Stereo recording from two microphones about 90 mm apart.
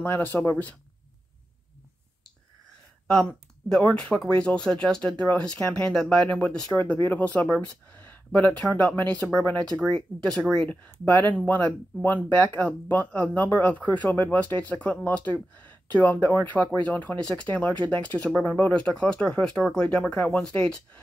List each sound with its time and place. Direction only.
0.0 s speech: 20° left (ahead or behind)
3.1 s speech: 10° left (ahead or behind)
6.8 s speech: 20° left (ahead or behind); by 10.7 s 5° left (ahead or behind)
10.7 s speech: 20° left (ahead or behind)